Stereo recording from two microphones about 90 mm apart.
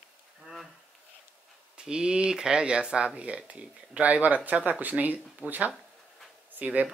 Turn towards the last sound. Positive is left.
turn(degrees=-15)  # may be behind; listen again after turning